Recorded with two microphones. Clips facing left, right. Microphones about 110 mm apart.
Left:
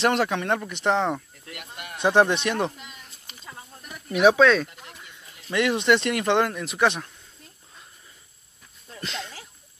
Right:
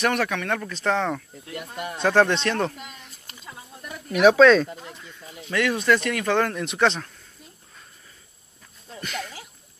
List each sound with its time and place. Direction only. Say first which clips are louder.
0.0 s speech: left 1 dB; 25° left (ahead or behind)
4.3 s speech: right 4 dB; 5° left (ahead or behind)
5.5 s speech: left 1 dB; 25° left (ahead or behind)
6.4 s speech: right 1 dB; 5° left (ahead or behind)
9.0 s speech: right 2 dB; 25° left (ahead or behind)